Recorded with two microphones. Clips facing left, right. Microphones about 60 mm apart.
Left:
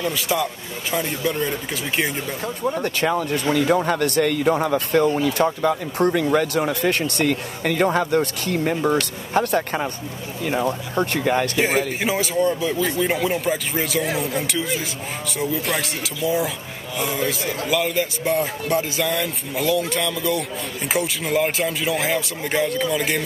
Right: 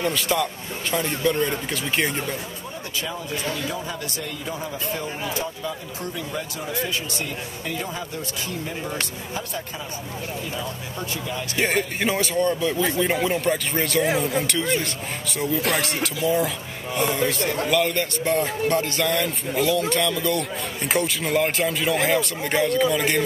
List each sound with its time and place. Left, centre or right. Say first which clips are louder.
0.1 s speech: left 1 dB; centre
2.6 s speech: left 10 dB; left
11.6 s speech: left 2 dB; centre